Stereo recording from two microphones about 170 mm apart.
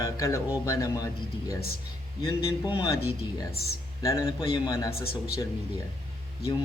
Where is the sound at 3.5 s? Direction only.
65° left (ahead or behind).